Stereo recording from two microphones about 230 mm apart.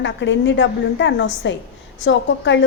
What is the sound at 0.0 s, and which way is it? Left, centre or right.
A woman's voice, left.